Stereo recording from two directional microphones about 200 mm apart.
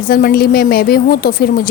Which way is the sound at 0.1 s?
50° left (ahead or behind).